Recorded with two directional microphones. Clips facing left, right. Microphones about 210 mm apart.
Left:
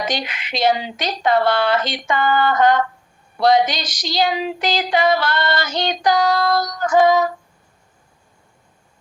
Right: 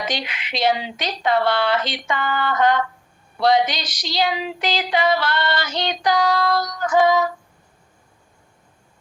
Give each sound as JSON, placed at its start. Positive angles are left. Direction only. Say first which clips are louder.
{"t": 0.0, "sound": "female singing", "louder": "left 3 dB", "side_deg": 45}